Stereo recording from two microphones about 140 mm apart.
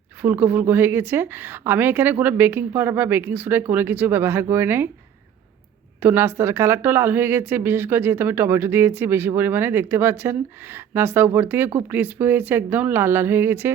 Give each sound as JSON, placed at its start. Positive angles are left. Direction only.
{"t": 0.2, "sound": "speech", "side_deg": -10}
{"t": 6.0, "sound": "speech", "side_deg": -15}